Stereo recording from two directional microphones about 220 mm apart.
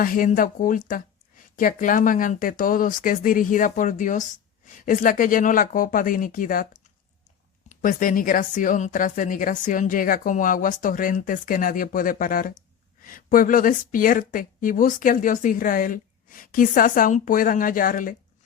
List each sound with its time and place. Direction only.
0.0 s speech: 40° left (ahead or behind)
7.7 s speech: 35° left (ahead or behind)